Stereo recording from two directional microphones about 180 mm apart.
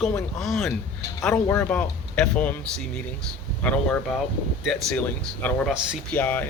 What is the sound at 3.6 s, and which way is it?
Speech, 5° left (ahead or behind).